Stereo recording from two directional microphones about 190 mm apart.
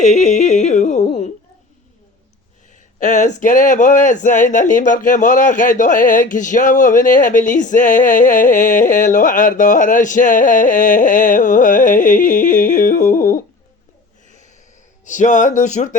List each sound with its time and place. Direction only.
0.0 s yodeling: 35° left (ahead or behind)
3.0 s speech: 40° left (ahead or behind)
15.0 s a sound: 40° left (ahead or behind)